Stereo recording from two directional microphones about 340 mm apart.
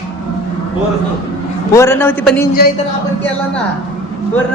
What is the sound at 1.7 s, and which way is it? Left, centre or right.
Speech, centre.